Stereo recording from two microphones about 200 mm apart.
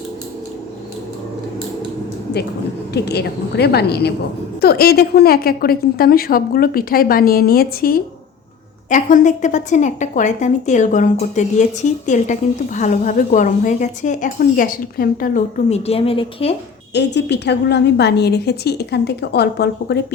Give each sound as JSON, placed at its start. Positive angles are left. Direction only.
{"t": 2.9, "sound": "a woman's voice", "side_deg": 55}
{"t": 16.9, "sound": "a woman's voice", "side_deg": 60}